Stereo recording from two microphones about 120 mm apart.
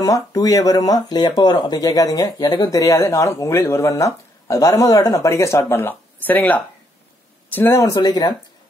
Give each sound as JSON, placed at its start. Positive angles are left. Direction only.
{"t": 0.0, "sound": "speech", "side_deg": 30}